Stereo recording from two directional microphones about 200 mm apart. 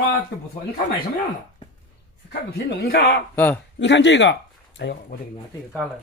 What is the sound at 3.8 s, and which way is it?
Speech, 60° left (ahead or behind).